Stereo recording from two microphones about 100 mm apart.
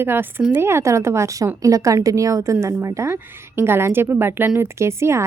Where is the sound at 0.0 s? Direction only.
20° right (ahead or behind).